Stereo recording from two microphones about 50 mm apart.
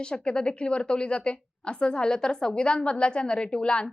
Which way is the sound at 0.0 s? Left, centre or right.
Centre.